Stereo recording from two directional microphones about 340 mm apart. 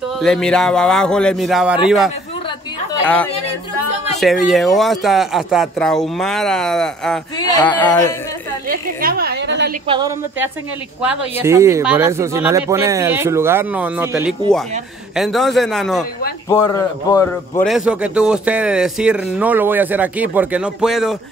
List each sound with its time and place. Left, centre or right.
0.2 s speech: centre
2.9 s chatter: centre
4.2 s speech: centre
8.6 s a sound: right
9.8 s speech: centre
17.6 s speech: centre